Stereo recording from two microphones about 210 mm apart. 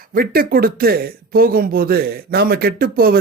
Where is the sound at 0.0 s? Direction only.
45° right (ahead or behind).